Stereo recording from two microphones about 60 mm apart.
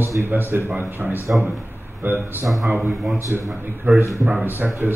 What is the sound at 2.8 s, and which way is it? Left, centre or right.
Speech, centre.